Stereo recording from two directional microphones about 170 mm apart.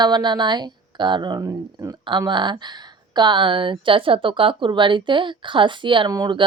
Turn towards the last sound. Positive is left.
turn(degrees=-25)  # may be behind; listen again after turning